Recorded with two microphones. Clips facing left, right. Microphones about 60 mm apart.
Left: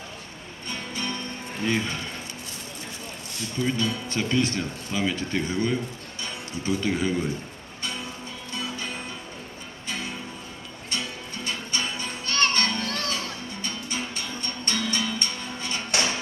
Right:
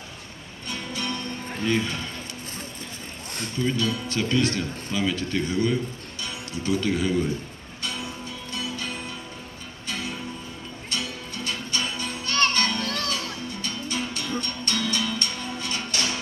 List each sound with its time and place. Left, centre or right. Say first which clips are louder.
0.7 s music: right 1 dB; centre
3.7 s a man's voice: right 1 dB; centre
7.9 s music: right 1 dB; centre
15.9 s music: left 4 dB; left